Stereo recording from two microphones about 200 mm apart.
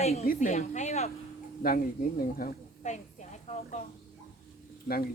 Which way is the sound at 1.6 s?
45° left (ahead or behind).